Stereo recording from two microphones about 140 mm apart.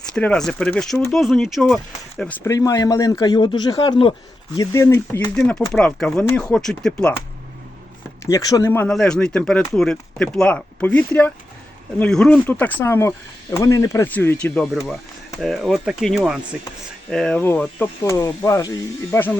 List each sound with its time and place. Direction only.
0.0 s speech: 5° left (ahead or behind)
2.5 s speech: 25° left (ahead or behind)
4.5 s speech: 25° left (ahead or behind)
5.7 s speech: 5° left (ahead or behind)
8.3 s speech: 25° left (ahead or behind)
8.9 s speech: 5° left (ahead or behind)
15.4 s speech: centre (ahead or behind); by 19.2 s 25° left (ahead or behind)